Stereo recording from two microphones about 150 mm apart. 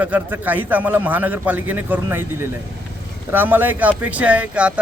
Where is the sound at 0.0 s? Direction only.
10° right (ahead or behind).